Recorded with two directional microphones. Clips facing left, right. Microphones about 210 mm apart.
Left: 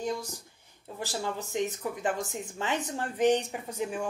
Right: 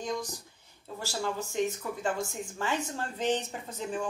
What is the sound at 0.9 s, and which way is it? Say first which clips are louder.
Speech: even; 15° left (ahead or behind).